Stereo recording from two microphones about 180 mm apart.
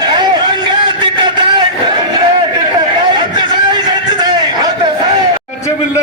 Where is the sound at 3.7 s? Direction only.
20° right (ahead or behind).